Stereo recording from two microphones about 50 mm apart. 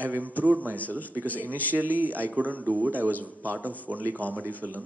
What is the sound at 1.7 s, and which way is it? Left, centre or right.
A man's voice, right.